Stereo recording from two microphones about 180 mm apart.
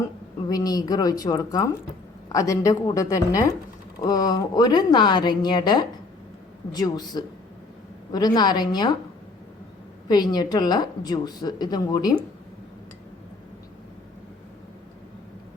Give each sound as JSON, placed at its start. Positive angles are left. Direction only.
{"t": 0.0, "sound": "a woman's voice", "side_deg": 20}
{"t": 10.1, "sound": "speech", "side_deg": 20}